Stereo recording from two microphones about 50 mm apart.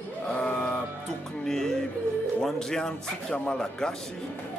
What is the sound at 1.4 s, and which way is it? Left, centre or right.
Music, centre.